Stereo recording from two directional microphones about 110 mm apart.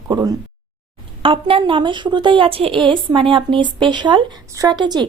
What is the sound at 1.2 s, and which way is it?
A woman's voice, 55° right (ahead or behind).